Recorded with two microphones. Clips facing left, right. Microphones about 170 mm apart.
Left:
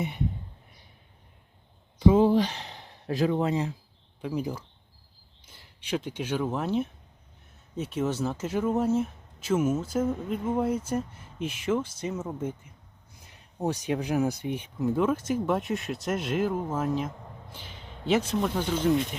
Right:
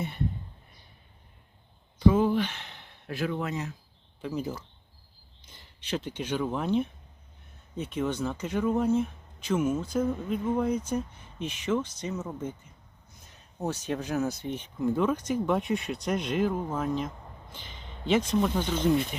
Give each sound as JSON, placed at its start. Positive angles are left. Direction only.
{"t": 2.1, "sound": "speech", "side_deg": 35}
{"t": 4.2, "sound": "speech", "side_deg": 10}